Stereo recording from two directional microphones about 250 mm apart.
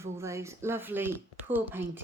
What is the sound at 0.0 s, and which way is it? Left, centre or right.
Speech, centre.